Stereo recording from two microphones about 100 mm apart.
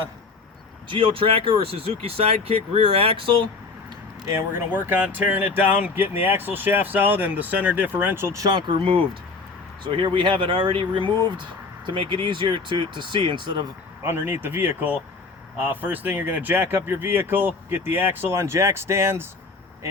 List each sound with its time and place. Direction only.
0.9 s speech: 60° right (ahead or behind)
4.3 s speech: 25° right (ahead or behind); by 13.7 s 55° right (ahead or behind)
14.0 s speech: 20° right (ahead or behind)